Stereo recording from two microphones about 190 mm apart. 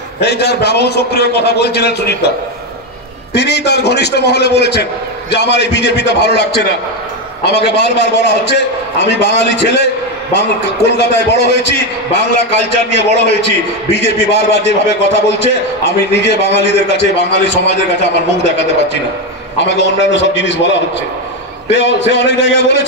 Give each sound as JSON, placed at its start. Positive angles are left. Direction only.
{"t": 0.2, "sound": "a man's voice", "side_deg": 60}
{"t": 3.3, "sound": "a man's voice", "side_deg": 65}
{"t": 11.0, "sound": "a man's voice", "side_deg": 65}
{"t": 19.6, "sound": "a man's voice", "side_deg": 65}